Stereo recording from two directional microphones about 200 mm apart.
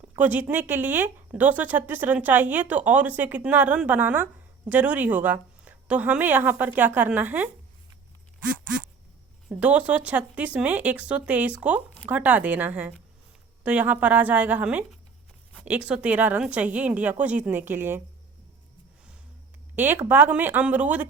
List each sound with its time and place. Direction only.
0.2 s a woman's voice: 10° right (ahead or behind)
9.5 s a woman's voice: 5° right (ahead or behind)
19.7 s a woman's voice: 10° right (ahead or behind)